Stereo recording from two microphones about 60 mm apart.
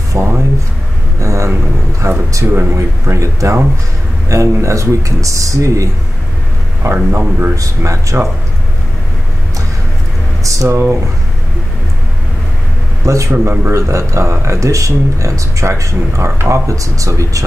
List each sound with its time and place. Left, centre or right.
0.1 s speech: right
1.2 s speech: right
2.4 s a man's voice: right
3.2 s speech: right
6.8 s a man's voice: right
7.5 s speech: right
10.4 s speech: right
13.0 s a man's voice: right